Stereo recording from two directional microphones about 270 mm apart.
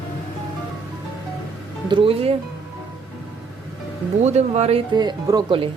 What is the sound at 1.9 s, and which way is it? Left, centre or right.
Speech, right.